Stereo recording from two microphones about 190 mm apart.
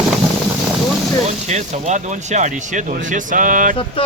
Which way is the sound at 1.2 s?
40° right (ahead or behind).